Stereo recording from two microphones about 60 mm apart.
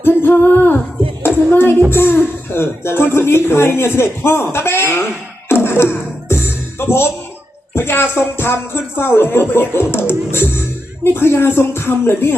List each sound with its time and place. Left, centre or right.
0.0 s speech: left
5.5 s music: left
7.8 s speech: left